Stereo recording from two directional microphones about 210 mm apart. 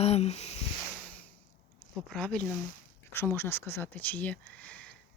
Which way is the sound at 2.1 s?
5° left (ahead or behind).